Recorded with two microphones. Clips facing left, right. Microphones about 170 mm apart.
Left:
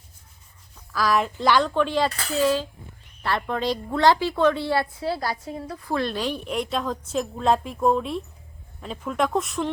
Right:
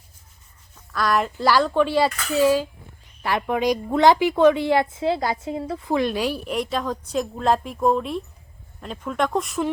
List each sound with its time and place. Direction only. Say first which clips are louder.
0.9 s a woman's voice: even; centre (ahead or behind); by 5.9 s 25° right (ahead or behind)
5.9 s a woman's voice: right 3 dB; 10° right (ahead or behind)